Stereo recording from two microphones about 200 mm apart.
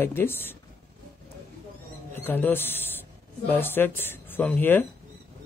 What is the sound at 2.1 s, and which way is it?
Speech, 10° left (ahead or behind).